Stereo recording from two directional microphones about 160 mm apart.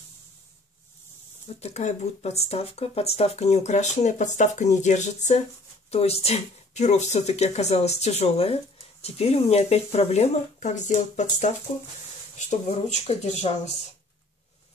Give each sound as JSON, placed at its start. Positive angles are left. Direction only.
{"t": 1.6, "sound": "speech", "side_deg": 45}